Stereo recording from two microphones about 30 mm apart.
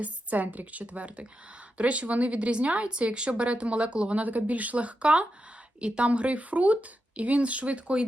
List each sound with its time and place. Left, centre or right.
0.0 s a woman's voice: right
4.2 s a woman's voice: right
6.1 s a woman's voice: right